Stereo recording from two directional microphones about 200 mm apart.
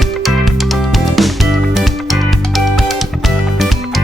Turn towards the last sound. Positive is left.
turn(degrees=0)  # may be behind; listen again after turning